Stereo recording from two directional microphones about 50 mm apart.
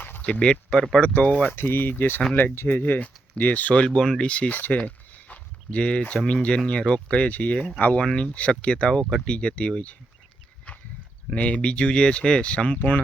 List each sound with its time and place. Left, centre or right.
0.2 s speech: left
1.0 s speech: left
1.5 s speech: left
3.8 s speech: centre
4.3 s a sound: left
6.2 s speech: left
8.9 s speech: centre
10.7 s a sound: left
11.3 s speech: left